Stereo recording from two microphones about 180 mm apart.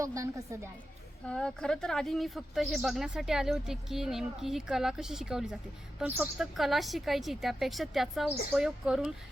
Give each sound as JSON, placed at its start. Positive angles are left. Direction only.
{"t": 0.0, "sound": "a woman's voice", "side_deg": -15}
{"t": 1.2, "sound": "speech", "side_deg": 5}